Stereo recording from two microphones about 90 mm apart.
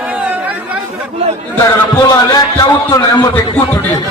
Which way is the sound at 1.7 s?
35° left (ahead or behind).